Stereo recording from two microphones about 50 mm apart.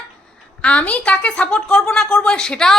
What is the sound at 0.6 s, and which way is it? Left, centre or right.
A woman's voice, left.